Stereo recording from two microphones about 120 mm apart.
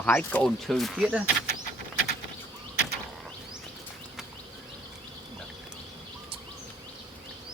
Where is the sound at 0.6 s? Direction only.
Centre (ahead or behind).